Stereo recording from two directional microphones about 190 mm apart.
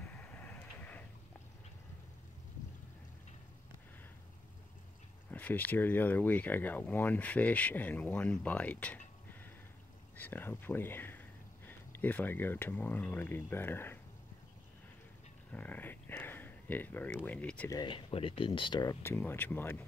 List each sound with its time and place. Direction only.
0.0 s vehicle: 10° left (ahead or behind)
5.3 s speech: 10° left (ahead or behind)
15.5 s speech: 10° left (ahead or behind)
17.7 s speech: 25° left (ahead or behind); by 19.8 s 10° left (ahead or behind)